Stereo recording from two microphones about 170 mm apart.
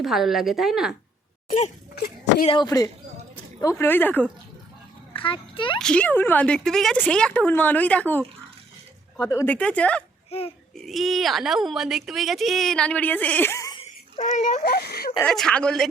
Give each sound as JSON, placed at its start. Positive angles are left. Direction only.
{"t": 0.0, "sound": "speech", "side_deg": 0}
{"t": 1.5, "sound": "speech", "side_deg": 45}
{"t": 2.5, "sound": "speech", "side_deg": 25}
{"t": 5.1, "sound": "a child's voice", "side_deg": 30}
{"t": 5.8, "sound": "speech", "side_deg": 5}
{"t": 10.2, "sound": "speech", "side_deg": 35}
{"t": 10.8, "sound": "speech", "side_deg": 0}
{"t": 14.2, "sound": "speech", "side_deg": 45}
{"t": 14.6, "sound": "speech", "side_deg": 75}
{"t": 15.2, "sound": "speech", "side_deg": 5}